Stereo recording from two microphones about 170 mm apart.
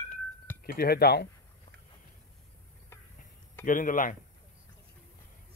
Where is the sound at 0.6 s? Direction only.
65° left (ahead or behind).